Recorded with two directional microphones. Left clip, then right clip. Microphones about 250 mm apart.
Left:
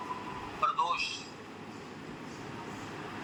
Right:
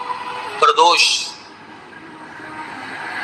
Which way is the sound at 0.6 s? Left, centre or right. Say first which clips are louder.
Right 18 dB; right.